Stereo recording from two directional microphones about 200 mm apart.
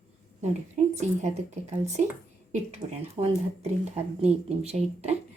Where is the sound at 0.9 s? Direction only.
35° right (ahead or behind).